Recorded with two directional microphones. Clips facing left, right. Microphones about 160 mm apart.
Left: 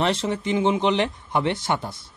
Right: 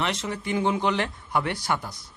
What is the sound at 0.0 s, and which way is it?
A man's voice, 30° left (ahead or behind).